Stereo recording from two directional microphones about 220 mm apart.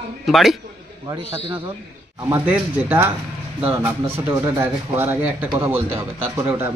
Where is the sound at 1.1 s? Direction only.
25° right (ahead or behind).